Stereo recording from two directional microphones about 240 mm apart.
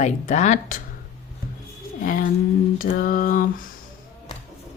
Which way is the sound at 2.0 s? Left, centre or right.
Left.